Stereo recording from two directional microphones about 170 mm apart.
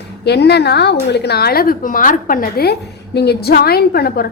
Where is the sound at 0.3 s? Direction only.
75° left (ahead or behind).